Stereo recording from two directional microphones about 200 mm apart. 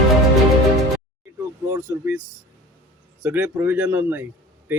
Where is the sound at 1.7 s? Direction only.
10° right (ahead or behind).